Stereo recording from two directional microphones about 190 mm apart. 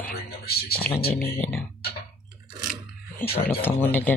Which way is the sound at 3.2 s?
55° left (ahead or behind).